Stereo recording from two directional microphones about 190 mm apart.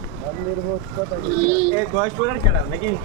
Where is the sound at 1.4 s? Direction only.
35° right (ahead or behind).